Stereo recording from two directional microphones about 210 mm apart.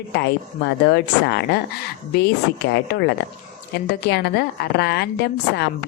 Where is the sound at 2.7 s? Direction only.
55° left (ahead or behind).